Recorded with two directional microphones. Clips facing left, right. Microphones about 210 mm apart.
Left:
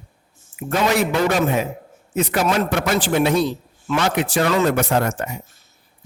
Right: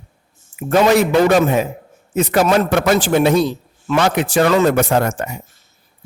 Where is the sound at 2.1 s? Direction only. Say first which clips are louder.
Right 5 dB; 40° right (ahead or behind).